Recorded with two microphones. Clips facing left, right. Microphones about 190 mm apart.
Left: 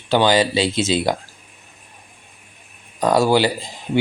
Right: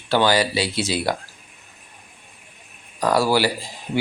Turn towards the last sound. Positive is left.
turn(degrees=20)  # may be behind; listen again after turning